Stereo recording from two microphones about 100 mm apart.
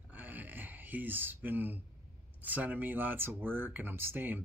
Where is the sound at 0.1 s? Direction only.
15° right (ahead or behind).